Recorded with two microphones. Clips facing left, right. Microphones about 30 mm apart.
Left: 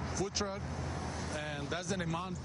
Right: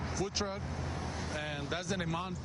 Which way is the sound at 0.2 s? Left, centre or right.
Centre.